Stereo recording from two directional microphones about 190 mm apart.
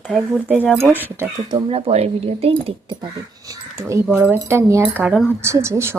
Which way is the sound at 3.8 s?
15° right (ahead or behind).